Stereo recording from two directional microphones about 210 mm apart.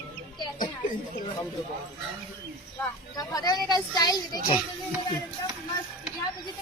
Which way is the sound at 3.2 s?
20° left (ahead or behind).